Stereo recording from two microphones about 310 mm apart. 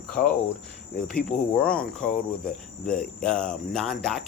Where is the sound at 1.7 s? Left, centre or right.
Centre.